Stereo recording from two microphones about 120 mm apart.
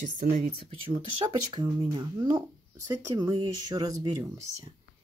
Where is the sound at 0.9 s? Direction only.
40° right (ahead or behind).